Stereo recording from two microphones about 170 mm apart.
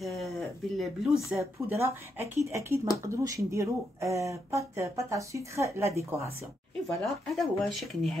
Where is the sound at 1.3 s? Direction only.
15° right (ahead or behind).